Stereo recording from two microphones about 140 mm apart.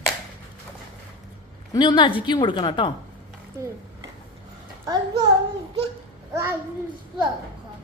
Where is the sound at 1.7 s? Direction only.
35° left (ahead or behind).